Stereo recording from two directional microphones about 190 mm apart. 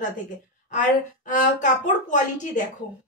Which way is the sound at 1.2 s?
45° left (ahead or behind).